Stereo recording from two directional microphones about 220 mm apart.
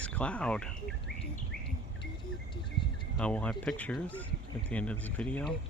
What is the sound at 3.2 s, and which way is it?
Speech, 5° left (ahead or behind).